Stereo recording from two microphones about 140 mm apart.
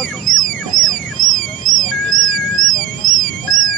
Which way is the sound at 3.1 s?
70° right (ahead or behind).